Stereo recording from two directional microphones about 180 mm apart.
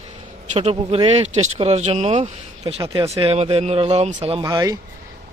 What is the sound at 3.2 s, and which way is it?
Speech, 35° right (ahead or behind).